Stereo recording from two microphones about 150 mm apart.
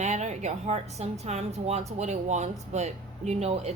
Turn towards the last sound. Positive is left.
turn(degrees=-45)  # may be behind; listen again after turning